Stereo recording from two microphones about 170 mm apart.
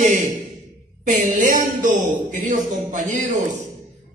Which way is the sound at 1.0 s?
50° right (ahead or behind).